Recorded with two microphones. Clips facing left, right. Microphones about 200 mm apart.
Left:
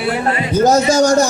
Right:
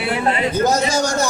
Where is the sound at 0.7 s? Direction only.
45° left (ahead or behind).